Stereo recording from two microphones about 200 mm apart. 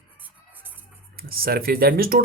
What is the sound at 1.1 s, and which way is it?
Speech, 50° right (ahead or behind).